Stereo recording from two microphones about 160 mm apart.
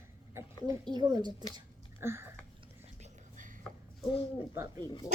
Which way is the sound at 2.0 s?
15° right (ahead or behind).